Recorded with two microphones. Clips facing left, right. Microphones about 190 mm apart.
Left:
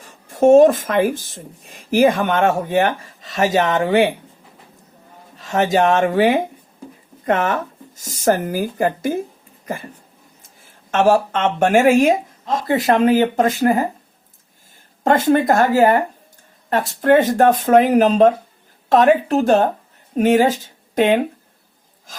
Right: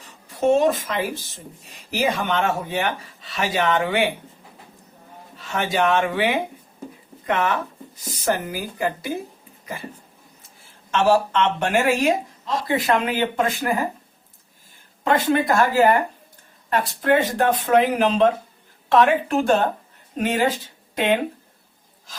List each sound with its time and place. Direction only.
0.0 s speech: 50° left (ahead or behind)
5.4 s speech: 40° left (ahead or behind)
10.9 s speech: 45° left (ahead or behind)
15.0 s a woman's voice: 45° left (ahead or behind)
20.9 s speech: 45° left (ahead or behind)